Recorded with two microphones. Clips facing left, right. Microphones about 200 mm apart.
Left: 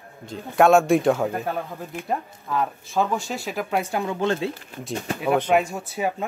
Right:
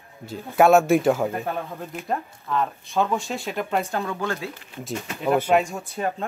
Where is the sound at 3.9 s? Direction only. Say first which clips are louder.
Left 3 dB; 15° left (ahead or behind).